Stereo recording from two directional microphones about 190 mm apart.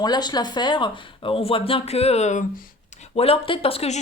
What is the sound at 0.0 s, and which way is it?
Speech, 20° left (ahead or behind).